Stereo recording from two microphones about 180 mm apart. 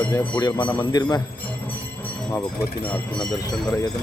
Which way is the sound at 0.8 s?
20° left (ahead or behind).